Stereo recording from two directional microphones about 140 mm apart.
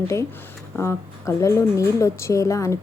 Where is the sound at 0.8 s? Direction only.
20° left (ahead or behind).